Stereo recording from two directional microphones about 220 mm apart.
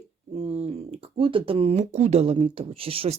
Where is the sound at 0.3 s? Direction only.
30° right (ahead or behind).